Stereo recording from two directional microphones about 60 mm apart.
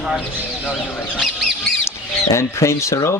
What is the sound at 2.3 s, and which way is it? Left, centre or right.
Speech, left.